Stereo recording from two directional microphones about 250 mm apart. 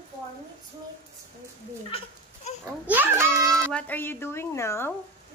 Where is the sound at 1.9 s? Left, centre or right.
Left.